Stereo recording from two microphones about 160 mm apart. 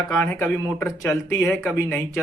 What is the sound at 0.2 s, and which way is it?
Speech, 15° left (ahead or behind).